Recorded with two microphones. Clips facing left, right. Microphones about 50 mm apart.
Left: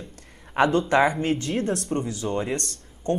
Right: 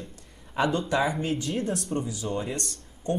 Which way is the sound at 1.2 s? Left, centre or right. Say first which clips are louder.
Left 4 dB; left.